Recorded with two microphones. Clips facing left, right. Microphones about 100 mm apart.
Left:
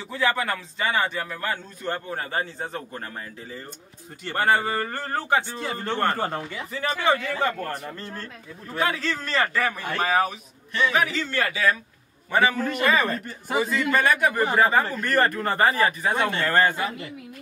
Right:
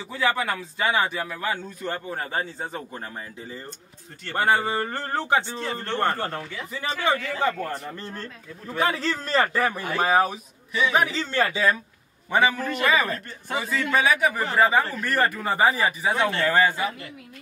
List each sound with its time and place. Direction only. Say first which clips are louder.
0.1 s speech: even; 10° right (ahead or behind)
4.4 s speech: even; 15° right (ahead or behind)
5.6 s speech: even; 10° left (ahead or behind)
7.9 s speech: right 1 dB; 15° right (ahead or behind)
8.8 s a man's voice: right 1 dB; 35° right (ahead or behind)
9.8 s speech: right 2 dB; 5° right (ahead or behind)
10.0 s a man's voice: right 2 dB; 35° right (ahead or behind); by 12.5 s 15° right (ahead or behind)
12.5 s speech: left 2 dB; 15° left (ahead or behind)
12.8 s speech: even; 5° right (ahead or behind)
14.4 s speech: left 1 dB; 10° left (ahead or behind)
14.7 s speech: left 1 dB; centre (ahead or behind)
16.2 s speech: right 3 dB; 15° left (ahead or behind)
16.4 s speech: even; 10° right (ahead or behind)